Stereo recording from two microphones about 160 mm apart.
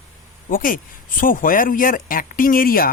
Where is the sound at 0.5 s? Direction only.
60° left (ahead or behind).